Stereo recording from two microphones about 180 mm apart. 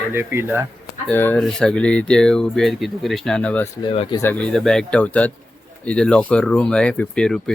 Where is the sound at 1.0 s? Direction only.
10° left (ahead or behind).